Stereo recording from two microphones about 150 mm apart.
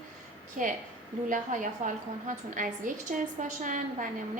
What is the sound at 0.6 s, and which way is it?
A woman's voice, 60° right (ahead or behind).